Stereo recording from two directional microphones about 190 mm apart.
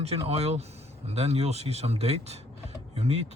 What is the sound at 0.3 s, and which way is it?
Speech, 35° right (ahead or behind).